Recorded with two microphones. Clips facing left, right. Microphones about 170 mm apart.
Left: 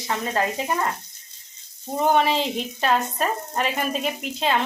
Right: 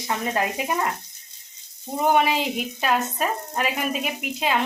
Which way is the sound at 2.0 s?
10° right (ahead or behind).